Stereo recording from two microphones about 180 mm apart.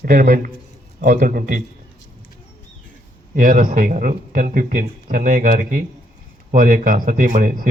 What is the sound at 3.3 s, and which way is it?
A man's voice, 45° right (ahead or behind).